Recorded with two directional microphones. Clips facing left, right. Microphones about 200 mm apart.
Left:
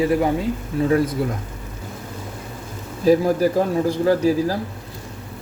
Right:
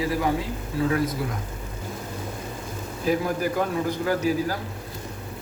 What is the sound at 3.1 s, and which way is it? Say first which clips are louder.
A man's voice: left 8 dB; 35° left (ahead or behind).